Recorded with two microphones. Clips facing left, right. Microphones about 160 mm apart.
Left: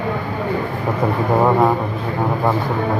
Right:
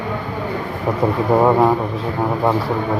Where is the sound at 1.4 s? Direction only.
Centre (ahead or behind).